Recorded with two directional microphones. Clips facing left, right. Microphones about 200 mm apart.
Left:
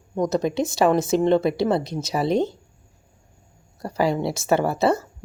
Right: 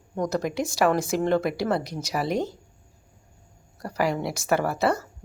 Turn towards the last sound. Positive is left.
turn(degrees=25)  # may be behind; listen again after turning